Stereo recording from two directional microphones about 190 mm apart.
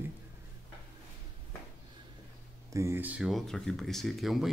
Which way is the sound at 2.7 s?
15° right (ahead or behind).